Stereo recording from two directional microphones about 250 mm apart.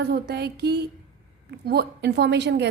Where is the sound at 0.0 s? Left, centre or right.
Right.